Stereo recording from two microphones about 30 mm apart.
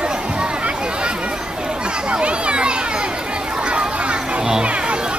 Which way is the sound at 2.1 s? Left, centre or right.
Right.